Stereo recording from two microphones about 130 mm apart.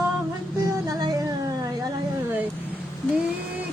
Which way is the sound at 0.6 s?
25° right (ahead or behind).